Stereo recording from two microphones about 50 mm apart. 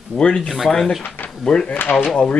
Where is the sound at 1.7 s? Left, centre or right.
Left.